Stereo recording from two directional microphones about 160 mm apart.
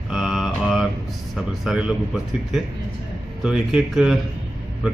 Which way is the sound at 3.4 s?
5° right (ahead or behind).